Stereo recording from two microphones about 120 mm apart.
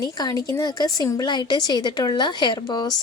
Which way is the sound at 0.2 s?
30° left (ahead or behind).